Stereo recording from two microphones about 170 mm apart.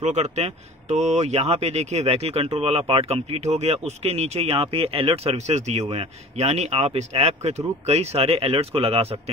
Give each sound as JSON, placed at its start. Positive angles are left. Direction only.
{"t": 0.0, "sound": "speech", "side_deg": -40}